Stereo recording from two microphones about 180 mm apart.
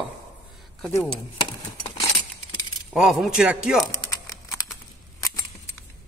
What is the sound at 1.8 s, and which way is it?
Keys jangling, 30° left (ahead or behind).